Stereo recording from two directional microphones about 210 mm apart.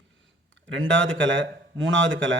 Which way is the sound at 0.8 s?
60° right (ahead or behind).